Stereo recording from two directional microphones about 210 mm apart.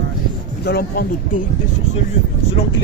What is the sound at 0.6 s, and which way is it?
Speech, 50° left (ahead or behind).